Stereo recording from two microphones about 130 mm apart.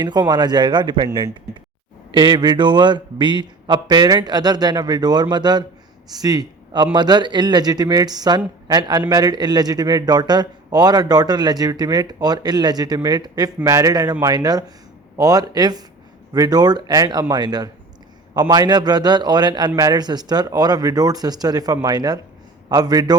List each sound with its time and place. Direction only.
0.0 s a man's voice: 35° right (ahead or behind)